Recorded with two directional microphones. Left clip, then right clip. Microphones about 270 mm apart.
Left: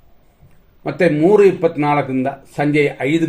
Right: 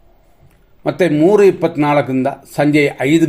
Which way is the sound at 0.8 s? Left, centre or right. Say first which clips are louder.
Right 2 dB; right.